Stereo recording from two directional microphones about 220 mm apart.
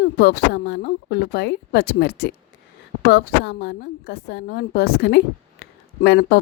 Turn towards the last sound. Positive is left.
turn(degrees=45)  # may be behind; listen again after turning